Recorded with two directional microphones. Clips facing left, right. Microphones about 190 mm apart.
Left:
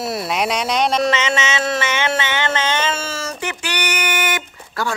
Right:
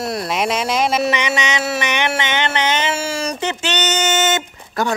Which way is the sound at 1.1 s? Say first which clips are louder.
Even; 15° right (ahead or behind).